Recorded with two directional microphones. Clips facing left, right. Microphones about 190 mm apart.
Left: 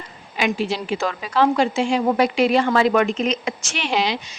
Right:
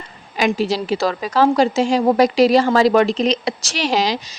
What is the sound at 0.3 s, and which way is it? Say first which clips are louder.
A woman's voice: right 4 dB; 40° right (ahead or behind).